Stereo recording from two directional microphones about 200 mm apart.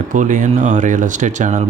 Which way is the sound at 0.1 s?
40° right (ahead or behind).